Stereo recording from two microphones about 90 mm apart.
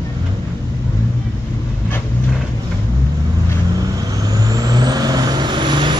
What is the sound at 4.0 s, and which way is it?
Vehicle, 45° right (ahead or behind).